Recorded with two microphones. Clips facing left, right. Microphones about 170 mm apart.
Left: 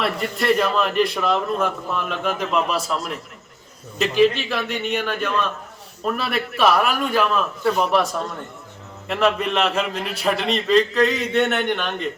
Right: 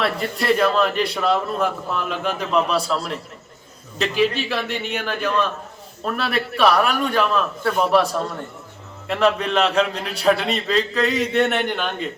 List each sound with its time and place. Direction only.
0.0 s a man's voice: centre (ahead or behind)
2.7 s a man's voice: 30° right (ahead or behind)
3.9 s a man's voice: centre (ahead or behind)
9.0 s a man's voice: centre (ahead or behind)